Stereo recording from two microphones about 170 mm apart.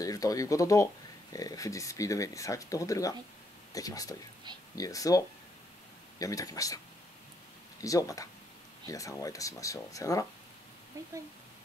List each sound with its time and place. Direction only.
0.0 s speech: 20° left (ahead or behind)
7.8 s speech: 20° left (ahead or behind)
10.9 s speech: 20° right (ahead or behind)